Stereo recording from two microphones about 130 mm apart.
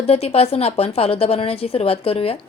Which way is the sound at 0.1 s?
50° left (ahead or behind).